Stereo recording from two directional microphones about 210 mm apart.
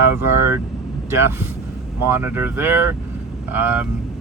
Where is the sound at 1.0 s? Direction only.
10° right (ahead or behind).